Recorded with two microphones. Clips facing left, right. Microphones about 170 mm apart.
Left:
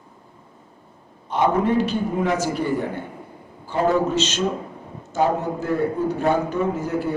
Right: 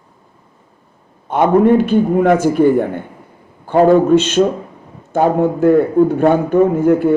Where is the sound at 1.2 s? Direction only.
55° right (ahead or behind).